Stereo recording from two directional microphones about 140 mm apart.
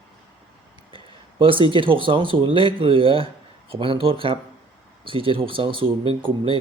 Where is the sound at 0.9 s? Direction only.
40° right (ahead or behind).